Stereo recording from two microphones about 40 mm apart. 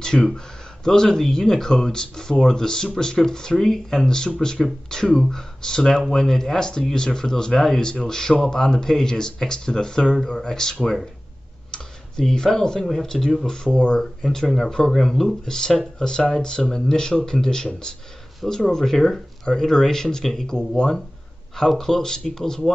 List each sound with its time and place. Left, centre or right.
0.0 s speech: centre
11.7 s clicking: centre
12.9 s speech: centre
13.7 s speech: left
13.9 s speech: centre